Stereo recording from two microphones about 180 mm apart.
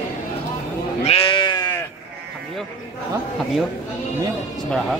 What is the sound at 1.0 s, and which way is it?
Sheep, 30° left (ahead or behind).